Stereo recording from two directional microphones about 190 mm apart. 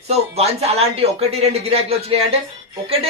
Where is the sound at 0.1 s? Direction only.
35° right (ahead or behind).